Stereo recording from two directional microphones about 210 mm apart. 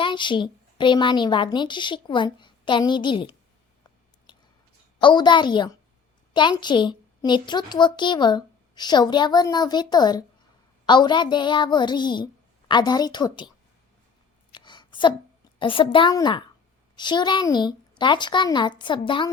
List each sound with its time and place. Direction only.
0.0 s a child's voice: 20° left (ahead or behind)
4.9 s a child's voice: 20° left (ahead or behind)
14.5 s a sound: 20° left (ahead or behind)
15.5 s a child's voice: 25° left (ahead or behind)